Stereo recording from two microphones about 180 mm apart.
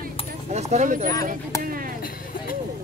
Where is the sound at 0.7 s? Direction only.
45° right (ahead or behind).